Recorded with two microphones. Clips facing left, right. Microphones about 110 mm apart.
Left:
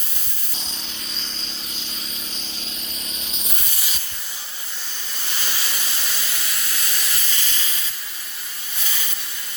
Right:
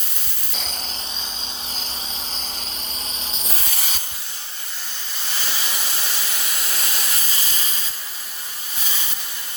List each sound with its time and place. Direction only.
3.2 s rub: 35° right (ahead or behind)
3.5 s sanding: 60° right (ahead or behind)
6.9 s steam: 30° right (ahead or behind)